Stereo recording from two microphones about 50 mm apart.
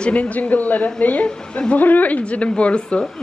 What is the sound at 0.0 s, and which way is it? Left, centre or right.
A woman's voice, left.